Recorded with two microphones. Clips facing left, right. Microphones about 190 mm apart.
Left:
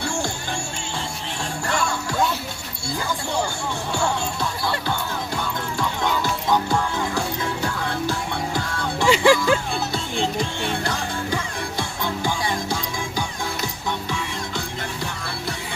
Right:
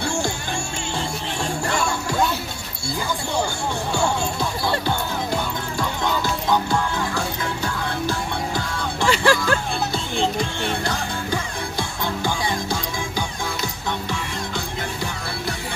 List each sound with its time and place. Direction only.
9.0 s music: 15° left (ahead or behind)